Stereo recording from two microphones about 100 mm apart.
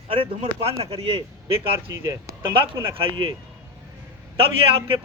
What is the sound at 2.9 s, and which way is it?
Speech, 60° right (ahead or behind).